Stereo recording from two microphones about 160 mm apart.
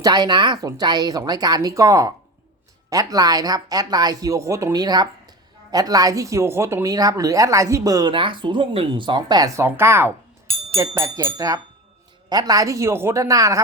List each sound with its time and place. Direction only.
0.0 s speech: 25° right (ahead or behind)
9.6 s speech: 15° right (ahead or behind)